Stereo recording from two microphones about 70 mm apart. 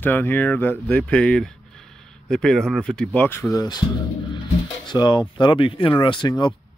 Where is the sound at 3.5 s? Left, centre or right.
Left.